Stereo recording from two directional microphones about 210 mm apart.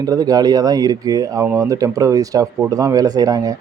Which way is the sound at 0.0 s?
20° right (ahead or behind).